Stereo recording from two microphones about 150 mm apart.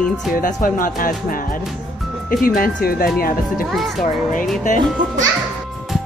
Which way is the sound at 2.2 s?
70° left (ahead or behind).